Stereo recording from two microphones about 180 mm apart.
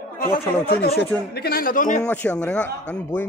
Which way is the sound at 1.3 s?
60° left (ahead or behind).